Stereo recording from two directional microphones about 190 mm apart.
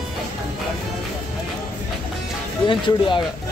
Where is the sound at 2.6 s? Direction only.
25° left (ahead or behind).